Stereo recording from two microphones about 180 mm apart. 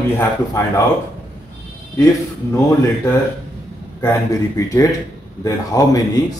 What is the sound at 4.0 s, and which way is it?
Speech, 20° left (ahead or behind).